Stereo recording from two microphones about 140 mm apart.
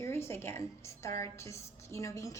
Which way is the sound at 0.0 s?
20° left (ahead or behind).